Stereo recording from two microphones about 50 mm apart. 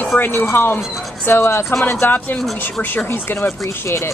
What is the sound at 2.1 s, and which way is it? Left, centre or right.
Speech, left.